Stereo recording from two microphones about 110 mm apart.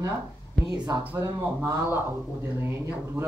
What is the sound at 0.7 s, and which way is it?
A woman's voice, 35° right (ahead or behind).